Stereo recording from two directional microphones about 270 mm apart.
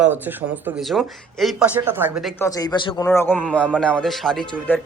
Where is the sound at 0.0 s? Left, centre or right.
Centre.